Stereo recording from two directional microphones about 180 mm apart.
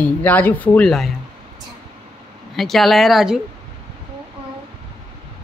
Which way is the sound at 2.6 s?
Centre (ahead or behind).